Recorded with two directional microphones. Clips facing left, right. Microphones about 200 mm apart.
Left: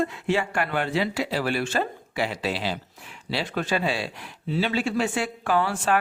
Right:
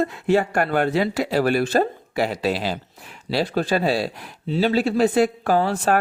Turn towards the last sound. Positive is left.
turn(degrees=-40)  # may be behind; listen again after turning